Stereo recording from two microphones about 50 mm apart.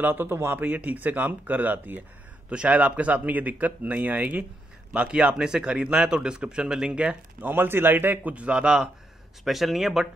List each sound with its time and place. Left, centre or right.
0.0 s speech: right
0.6 s speech: right
2.5 s a man's voice: right
7.4 s speech: right; by 8.8 s centre
9.4 s speech: centre